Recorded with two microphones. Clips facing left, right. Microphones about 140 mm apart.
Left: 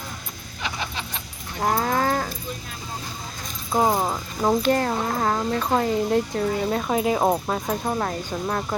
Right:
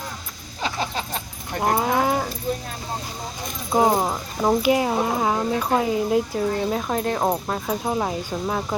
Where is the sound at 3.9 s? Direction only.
5° right (ahead or behind).